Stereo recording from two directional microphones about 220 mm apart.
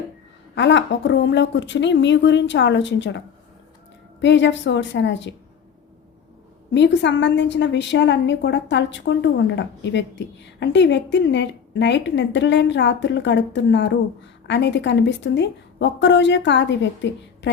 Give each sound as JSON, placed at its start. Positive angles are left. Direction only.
{"t": 0.5, "sound": "a woman's voice", "side_deg": 55}
{"t": 6.7, "sound": "a woman's voice", "side_deg": 55}